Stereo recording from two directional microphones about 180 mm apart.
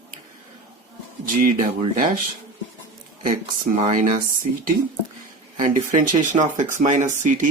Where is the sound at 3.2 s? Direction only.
50° right (ahead or behind).